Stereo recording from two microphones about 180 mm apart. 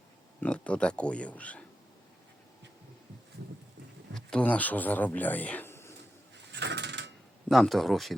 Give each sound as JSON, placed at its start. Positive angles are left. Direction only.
{"t": 0.4, "sound": "speech", "side_deg": 5}
{"t": 4.1, "sound": "speech", "side_deg": 5}
{"t": 6.5, "sound": "mechanisms", "side_deg": -75}
{"t": 7.4, "sound": "speech", "side_deg": 0}